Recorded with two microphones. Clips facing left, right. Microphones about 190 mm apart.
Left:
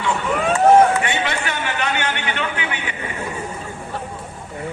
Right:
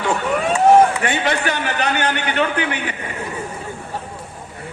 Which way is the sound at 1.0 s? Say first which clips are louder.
Right 3 dB; 40° right (ahead or behind).